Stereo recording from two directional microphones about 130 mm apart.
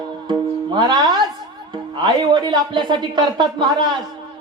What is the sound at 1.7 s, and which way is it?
Speech, 35° right (ahead or behind).